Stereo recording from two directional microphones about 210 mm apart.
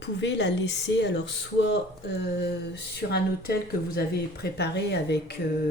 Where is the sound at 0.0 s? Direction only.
55° left (ahead or behind).